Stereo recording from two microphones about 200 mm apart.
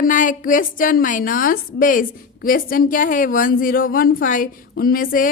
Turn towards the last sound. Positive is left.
turn(degrees=45)  # may be behind; listen again after turning